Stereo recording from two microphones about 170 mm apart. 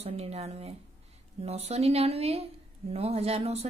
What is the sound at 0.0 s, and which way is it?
A woman's voice, 40° right (ahead or behind).